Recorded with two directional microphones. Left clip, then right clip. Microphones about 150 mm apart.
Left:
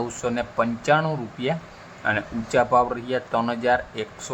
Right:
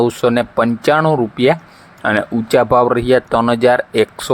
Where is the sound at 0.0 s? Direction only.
60° right (ahead or behind).